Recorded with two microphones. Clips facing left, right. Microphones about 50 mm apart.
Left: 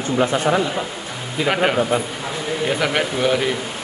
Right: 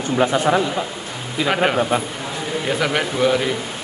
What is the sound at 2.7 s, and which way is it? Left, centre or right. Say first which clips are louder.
Speech: right 1 dB; centre.